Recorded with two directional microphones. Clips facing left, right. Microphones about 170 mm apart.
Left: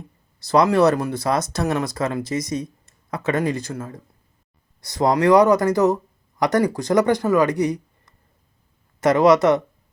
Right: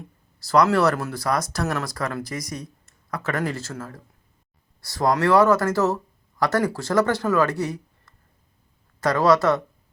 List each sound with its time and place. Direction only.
0.4 s speech: 20° left (ahead or behind)